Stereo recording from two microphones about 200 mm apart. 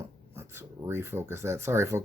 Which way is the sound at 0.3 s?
10° right (ahead or behind).